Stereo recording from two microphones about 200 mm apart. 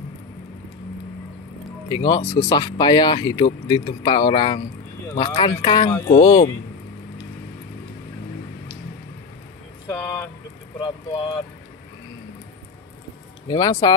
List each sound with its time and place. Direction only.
1.9 s speech: 20° left (ahead or behind)
9.8 s vehicle: 15° left (ahead or behind)
10.8 s speech: 20° left (ahead or behind)
13.5 s speech: 20° left (ahead or behind)